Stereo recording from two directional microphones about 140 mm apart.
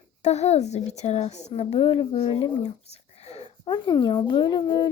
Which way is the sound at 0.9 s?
50° left (ahead or behind).